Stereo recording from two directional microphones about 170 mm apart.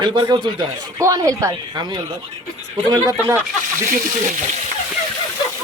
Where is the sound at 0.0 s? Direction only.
25° right (ahead or behind).